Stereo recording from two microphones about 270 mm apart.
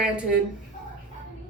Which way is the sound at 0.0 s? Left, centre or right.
Centre.